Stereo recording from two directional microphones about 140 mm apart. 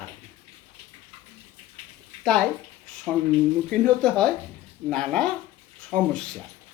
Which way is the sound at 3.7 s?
5° left (ahead or behind).